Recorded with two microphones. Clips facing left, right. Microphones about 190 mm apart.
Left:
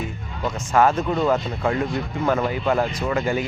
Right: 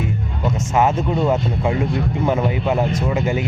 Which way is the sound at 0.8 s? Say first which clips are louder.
Even; 20° right (ahead or behind).